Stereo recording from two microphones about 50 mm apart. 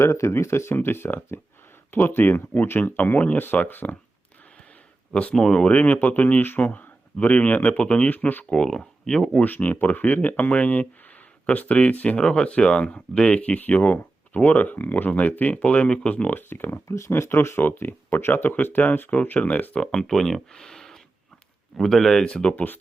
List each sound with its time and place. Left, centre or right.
0.0 s speech: left
5.3 s speech: centre
5.7 s speech: left
7.8 s speech: left
8.1 s speech: left
8.4 s speech: centre
9.4 s speech: left; by 13.4 s centre
13.4 s speech: left
15.6 s speech: left
16.3 s speech: left
17.2 s speech: left
19.8 s speech: centre
22.3 s speech: left